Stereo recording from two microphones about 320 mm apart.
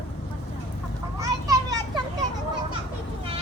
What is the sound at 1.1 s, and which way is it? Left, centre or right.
Children playing, centre.